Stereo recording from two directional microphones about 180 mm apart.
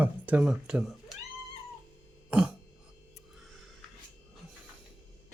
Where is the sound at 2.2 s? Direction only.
5° right (ahead or behind).